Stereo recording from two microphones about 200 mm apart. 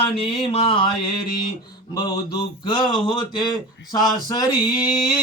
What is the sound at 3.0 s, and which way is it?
Speech, 25° left (ahead or behind).